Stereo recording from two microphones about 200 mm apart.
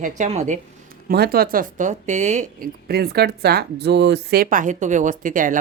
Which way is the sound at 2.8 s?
50° right (ahead or behind).